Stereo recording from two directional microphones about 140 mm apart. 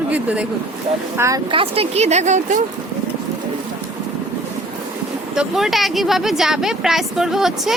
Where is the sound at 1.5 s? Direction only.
40° right (ahead or behind); by 2.6 s 60° right (ahead or behind).